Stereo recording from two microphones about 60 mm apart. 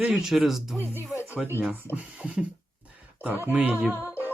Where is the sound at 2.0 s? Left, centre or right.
Right.